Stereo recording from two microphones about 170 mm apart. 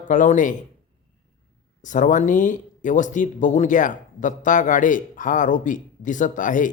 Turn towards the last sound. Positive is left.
turn(degrees=50)  # may be behind; listen again after turning